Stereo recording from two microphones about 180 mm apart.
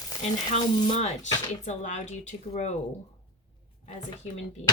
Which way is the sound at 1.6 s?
40° left (ahead or behind).